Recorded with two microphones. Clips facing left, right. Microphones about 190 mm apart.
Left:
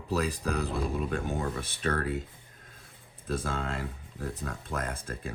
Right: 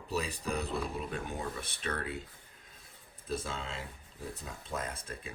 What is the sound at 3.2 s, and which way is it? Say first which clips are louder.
Speech: left 5 dB; 55° left (ahead or behind).